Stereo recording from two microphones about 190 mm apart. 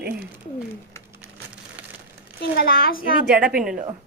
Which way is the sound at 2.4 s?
50° left (ahead or behind).